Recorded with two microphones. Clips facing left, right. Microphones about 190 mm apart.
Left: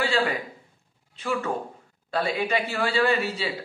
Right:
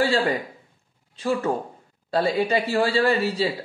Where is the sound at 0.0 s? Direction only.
35° right (ahead or behind).